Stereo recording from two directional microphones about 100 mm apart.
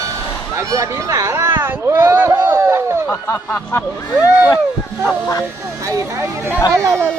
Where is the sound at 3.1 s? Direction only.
25° left (ahead or behind).